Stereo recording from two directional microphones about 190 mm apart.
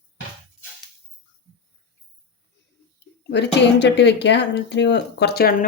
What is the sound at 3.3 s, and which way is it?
Speech, 65° left (ahead or behind).